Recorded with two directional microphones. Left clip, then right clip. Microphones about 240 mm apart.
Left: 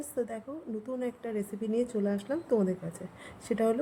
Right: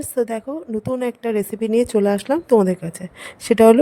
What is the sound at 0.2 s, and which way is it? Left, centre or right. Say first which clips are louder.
A woman's voice: right 13 dB; right.